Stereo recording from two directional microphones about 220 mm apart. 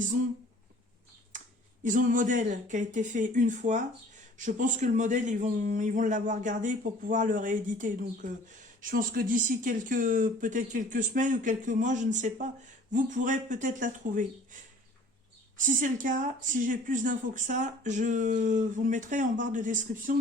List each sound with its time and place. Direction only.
1.8 s speech: 35° right (ahead or behind)
15.5 s speech: 35° right (ahead or behind)